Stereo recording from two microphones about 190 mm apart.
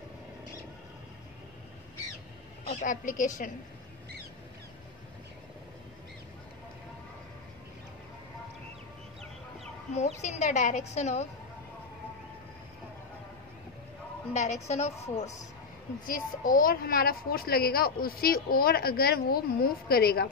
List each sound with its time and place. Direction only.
2.7 s a woman's voice: 45° left (ahead or behind)
9.9 s a woman's voice: 40° left (ahead or behind)
14.3 s a woman's voice: 35° left (ahead or behind)
16.1 s a woman's voice: 45° left (ahead or behind)